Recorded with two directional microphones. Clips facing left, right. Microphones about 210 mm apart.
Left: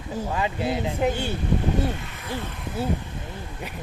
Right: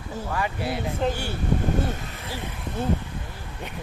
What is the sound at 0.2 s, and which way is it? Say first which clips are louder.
Speech: left 2 dB; 20° left (ahead or behind).